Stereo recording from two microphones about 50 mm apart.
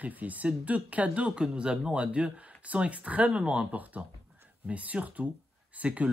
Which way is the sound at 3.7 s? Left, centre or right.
Right.